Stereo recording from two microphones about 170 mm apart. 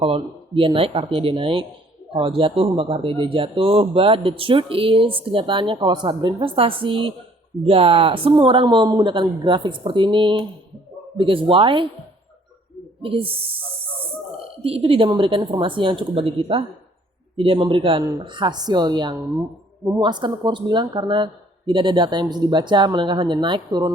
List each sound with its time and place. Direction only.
0.0 s speech: 30° right (ahead or behind)
13.0 s speech: 35° right (ahead or behind)